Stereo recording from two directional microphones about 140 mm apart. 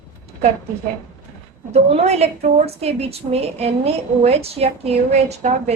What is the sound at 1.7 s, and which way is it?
A woman's voice, 50° right (ahead or behind).